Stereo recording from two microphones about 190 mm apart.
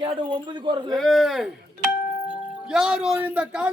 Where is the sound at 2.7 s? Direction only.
5° right (ahead or behind).